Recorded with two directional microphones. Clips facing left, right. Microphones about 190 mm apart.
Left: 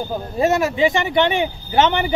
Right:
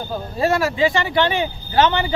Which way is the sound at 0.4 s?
20° left (ahead or behind).